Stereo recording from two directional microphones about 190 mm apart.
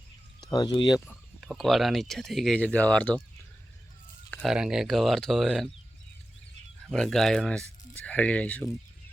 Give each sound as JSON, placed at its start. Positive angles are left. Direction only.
{"t": 0.5, "sound": "speech", "side_deg": 20}
{"t": 1.0, "sound": "speech", "side_deg": 0}
{"t": 4.3, "sound": "a sound", "side_deg": 5}
{"t": 4.5, "sound": "speech", "side_deg": -5}
{"t": 6.8, "sound": "speech", "side_deg": 5}